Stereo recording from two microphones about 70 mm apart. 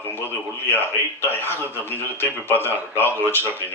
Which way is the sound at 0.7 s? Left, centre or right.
Left.